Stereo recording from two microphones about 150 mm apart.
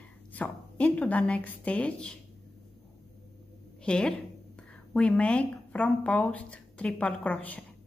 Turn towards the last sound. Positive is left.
turn(degrees=10)  # may be behind; listen again after turning